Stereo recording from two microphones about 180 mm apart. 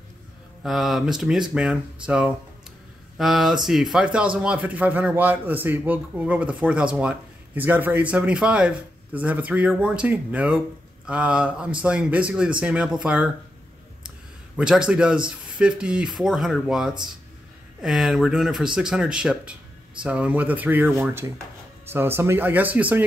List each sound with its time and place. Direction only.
0.7 s speech: centre (ahead or behind)
14.6 s speech: 5° right (ahead or behind)